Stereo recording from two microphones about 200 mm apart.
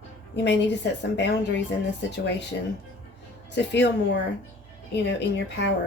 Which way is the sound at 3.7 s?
65° left (ahead or behind).